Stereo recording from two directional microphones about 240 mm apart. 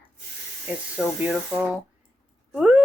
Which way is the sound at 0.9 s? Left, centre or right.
Centre.